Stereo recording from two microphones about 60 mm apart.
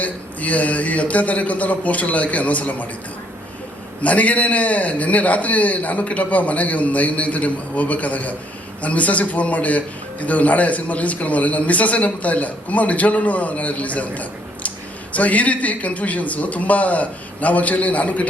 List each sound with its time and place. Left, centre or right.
0.0 s a man's voice: left
4.0 s a man's voice: left